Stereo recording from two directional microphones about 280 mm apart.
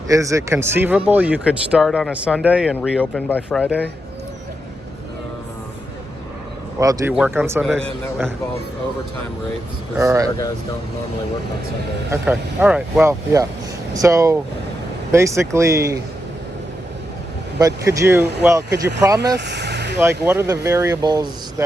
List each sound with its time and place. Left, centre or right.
0.1 s speech: centre
6.7 s speech: centre
10.0 s speech: centre
12.1 s speech: centre
17.6 s speech: centre
19.4 s speech: right
20.0 s speech: centre